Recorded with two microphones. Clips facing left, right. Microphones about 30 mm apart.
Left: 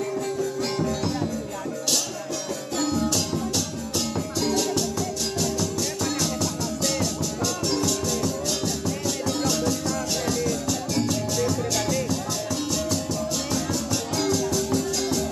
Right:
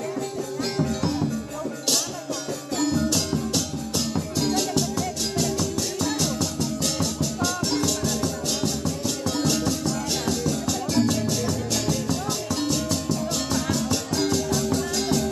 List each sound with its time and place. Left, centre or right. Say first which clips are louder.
0.7 s music: right 3 dB; centre
2.9 s music: right 1 dB; centre
14.1 s music: left 1 dB; centre